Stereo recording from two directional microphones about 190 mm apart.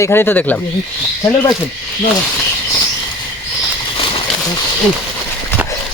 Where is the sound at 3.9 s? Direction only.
30° left (ahead or behind).